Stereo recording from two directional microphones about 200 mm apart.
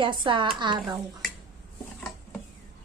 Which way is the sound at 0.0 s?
25° right (ahead or behind).